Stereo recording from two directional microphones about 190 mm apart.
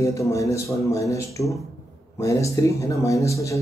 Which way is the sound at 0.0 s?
15° left (ahead or behind).